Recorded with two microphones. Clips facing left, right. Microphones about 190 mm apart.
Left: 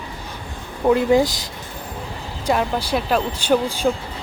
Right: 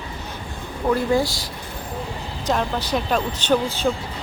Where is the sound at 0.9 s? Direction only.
20° left (ahead or behind).